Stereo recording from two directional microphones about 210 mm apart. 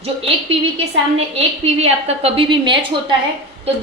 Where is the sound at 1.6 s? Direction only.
30° right (ahead or behind).